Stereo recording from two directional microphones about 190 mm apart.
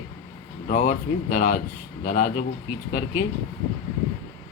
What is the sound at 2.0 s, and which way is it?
Speech, 40° left (ahead or behind).